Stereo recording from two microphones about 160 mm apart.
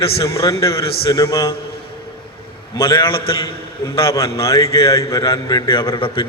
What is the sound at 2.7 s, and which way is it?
A man's voice, 30° left (ahead or behind).